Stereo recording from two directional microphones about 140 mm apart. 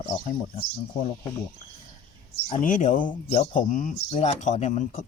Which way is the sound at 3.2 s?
50° left (ahead or behind).